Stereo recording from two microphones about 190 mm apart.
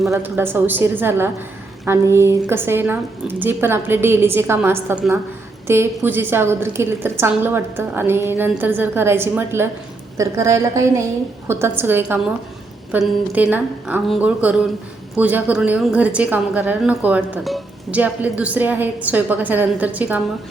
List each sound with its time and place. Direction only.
0.1 s a woman's voice: 10° right (ahead or behind)